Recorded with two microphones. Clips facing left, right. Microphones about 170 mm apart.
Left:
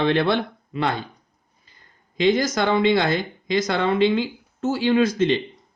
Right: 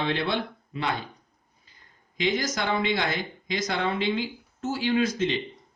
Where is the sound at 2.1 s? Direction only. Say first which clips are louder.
Left 8 dB; 65° left (ahead or behind).